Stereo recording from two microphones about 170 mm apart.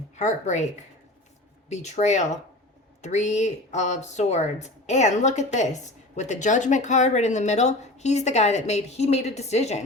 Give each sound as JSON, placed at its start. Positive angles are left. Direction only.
{"t": 0.2, "sound": "speech", "side_deg": 45}
{"t": 1.7, "sound": "speech", "side_deg": 45}